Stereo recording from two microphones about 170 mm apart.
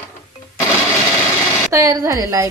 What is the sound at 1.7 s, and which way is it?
Speech, 20° right (ahead or behind).